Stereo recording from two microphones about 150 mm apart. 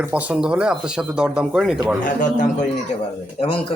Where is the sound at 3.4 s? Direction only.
40° left (ahead or behind).